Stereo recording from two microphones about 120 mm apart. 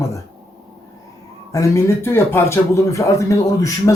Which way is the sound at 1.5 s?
25° left (ahead or behind).